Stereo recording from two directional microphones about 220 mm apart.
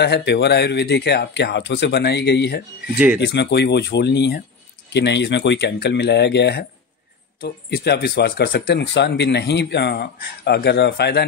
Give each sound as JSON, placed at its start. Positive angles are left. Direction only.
{"t": 0.0, "sound": "speech", "side_deg": 50}